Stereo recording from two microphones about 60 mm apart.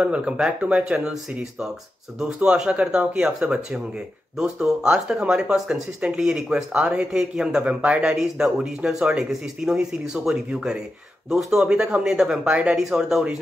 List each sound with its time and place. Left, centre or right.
0.0 s speech: centre